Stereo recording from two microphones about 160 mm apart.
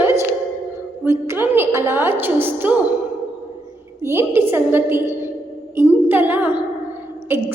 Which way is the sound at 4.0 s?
15° right (ahead or behind).